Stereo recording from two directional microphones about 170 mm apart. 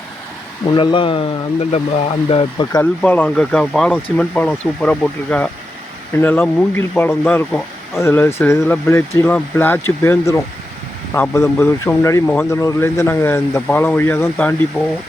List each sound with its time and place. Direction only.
0.7 s speech: 30° left (ahead or behind)
3.0 s speech: 10° left (ahead or behind)